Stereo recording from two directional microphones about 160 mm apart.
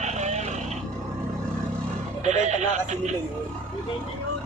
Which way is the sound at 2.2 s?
45° right (ahead or behind).